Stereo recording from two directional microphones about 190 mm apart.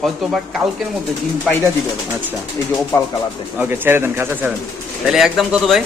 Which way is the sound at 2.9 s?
15° left (ahead or behind).